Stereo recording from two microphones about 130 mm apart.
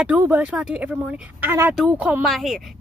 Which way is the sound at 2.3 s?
Centre (ahead or behind).